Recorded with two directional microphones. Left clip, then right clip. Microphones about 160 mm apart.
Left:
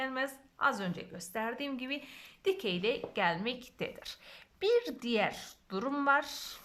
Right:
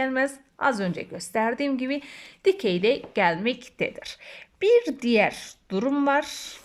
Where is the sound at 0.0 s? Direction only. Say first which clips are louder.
Right 11 dB; 35° right (ahead or behind).